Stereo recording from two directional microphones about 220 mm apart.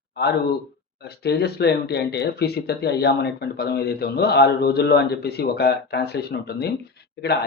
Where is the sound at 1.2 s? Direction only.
45° left (ahead or behind).